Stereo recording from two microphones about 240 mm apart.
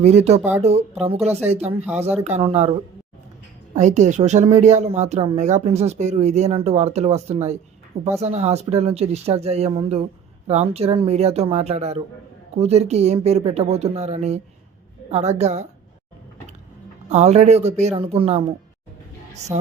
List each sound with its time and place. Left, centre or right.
0.0 s speech: right
3.8 s speech: right
17.1 s speech: right
19.5 s speech: centre